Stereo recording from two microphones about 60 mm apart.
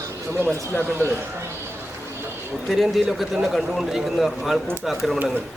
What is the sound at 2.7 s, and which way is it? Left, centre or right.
A man's voice, centre.